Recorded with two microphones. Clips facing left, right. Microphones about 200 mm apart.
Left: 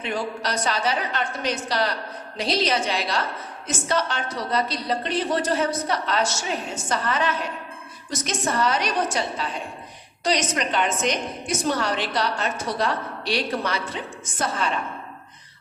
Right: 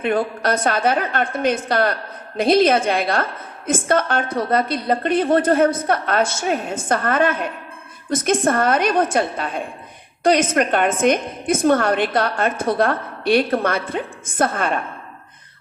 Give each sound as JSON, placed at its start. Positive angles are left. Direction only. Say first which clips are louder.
{"t": 0.0, "sound": "a woman's voice", "louder": "right 7 dB", "side_deg": -55}